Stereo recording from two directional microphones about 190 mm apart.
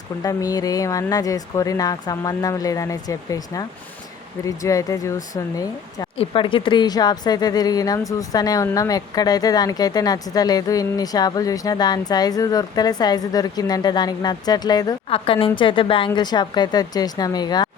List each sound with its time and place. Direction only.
0.2 s a woman's voice: 20° left (ahead or behind)